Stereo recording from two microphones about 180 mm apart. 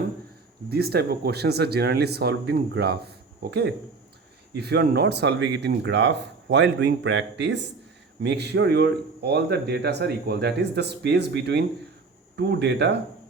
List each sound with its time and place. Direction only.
0.7 s a man's voice: 60° right (ahead or behind)